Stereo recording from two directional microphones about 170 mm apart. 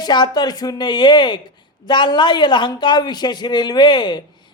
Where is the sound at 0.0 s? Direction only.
25° left (ahead or behind).